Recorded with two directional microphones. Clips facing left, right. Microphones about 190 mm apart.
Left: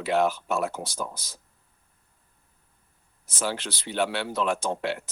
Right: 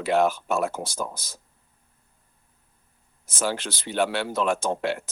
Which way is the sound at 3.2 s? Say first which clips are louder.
Right 2 dB; 45° right (ahead or behind).